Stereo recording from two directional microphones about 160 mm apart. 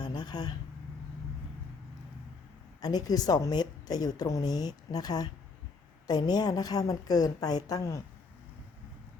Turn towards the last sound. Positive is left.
turn(degrees=20)  # may be behind; listen again after turning